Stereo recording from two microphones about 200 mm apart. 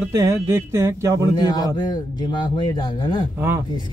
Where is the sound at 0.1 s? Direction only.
15° right (ahead or behind).